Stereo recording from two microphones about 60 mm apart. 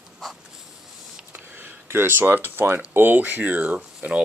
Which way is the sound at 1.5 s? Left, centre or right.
Right.